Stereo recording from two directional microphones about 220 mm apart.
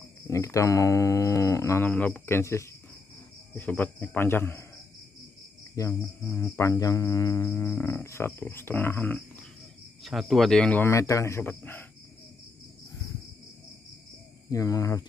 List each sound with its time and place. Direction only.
0.3 s cricket: 15° left (ahead or behind)
5.8 s cricket: 10° left (ahead or behind)
14.5 s cricket: 15° left (ahead or behind)